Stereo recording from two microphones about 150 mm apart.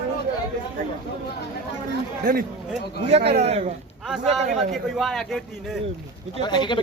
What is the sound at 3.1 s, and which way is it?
Speech, 45° right (ahead or behind).